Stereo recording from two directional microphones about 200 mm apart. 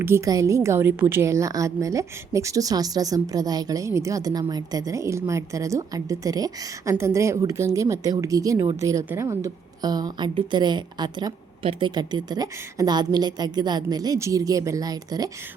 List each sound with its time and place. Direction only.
0.0 s a woman's voice: 15° right (ahead or behind)